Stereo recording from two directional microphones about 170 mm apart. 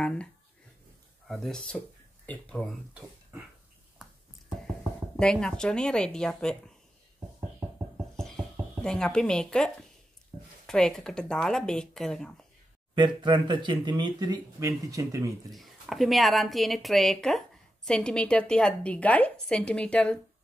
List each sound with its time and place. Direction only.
0.0 s a woman's voice: 5° left (ahead or behind)
5.1 s a woman's voice: 5° left (ahead or behind)
8.2 s a sound: 5° left (ahead or behind)
10.7 s a woman's voice: 5° left (ahead or behind)
12.9 s speech: 25° right (ahead or behind)
15.5 s a woman's voice: centre (ahead or behind)